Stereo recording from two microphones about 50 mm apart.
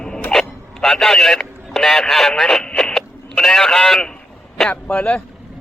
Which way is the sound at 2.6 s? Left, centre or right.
Centre.